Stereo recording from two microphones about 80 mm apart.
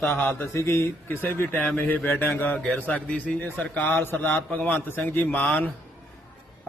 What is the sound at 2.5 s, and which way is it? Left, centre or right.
A man's voice, centre.